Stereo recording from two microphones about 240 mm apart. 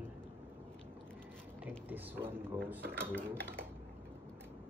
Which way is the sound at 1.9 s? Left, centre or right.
Centre.